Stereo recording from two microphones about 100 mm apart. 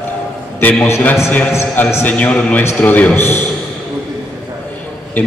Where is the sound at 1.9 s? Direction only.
15° left (ahead or behind).